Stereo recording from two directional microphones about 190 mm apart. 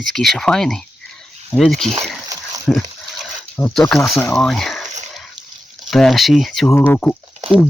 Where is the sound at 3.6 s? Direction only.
15° left (ahead or behind).